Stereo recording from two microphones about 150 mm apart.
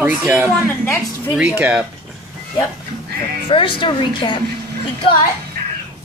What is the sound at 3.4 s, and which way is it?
Speech, 35° left (ahead or behind).